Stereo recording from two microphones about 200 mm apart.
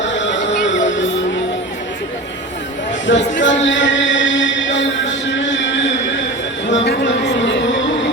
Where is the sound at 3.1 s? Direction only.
65° left (ahead or behind).